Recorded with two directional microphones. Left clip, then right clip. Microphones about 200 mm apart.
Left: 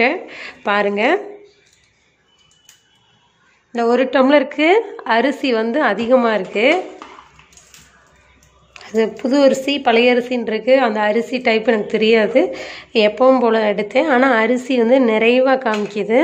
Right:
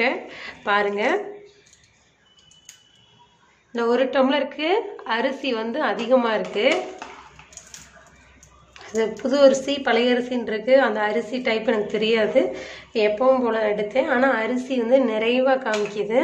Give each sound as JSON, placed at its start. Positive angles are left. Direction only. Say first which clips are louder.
{"t": 0.0, "sound": "a woman's voice", "louder": "left 6 dB", "side_deg": 25}
{"t": 3.7, "sound": "a woman's voice", "louder": "left 5 dB", "side_deg": 25}
{"t": 8.7, "sound": "a woman's voice", "louder": "left 6 dB", "side_deg": 30}